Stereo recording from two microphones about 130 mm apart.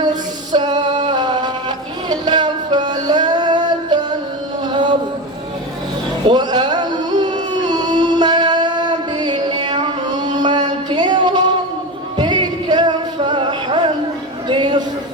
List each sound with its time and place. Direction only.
0.5 s music: 35° right (ahead or behind)
6.2 s music: 35° right (ahead or behind)
14.4 s a sound: 35° right (ahead or behind)